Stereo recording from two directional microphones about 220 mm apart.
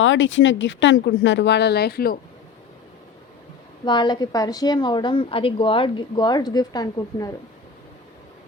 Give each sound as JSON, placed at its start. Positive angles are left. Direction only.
{"t": 0.0, "sound": "speech", "side_deg": 60}
{"t": 3.8, "sound": "a woman's voice", "side_deg": 20}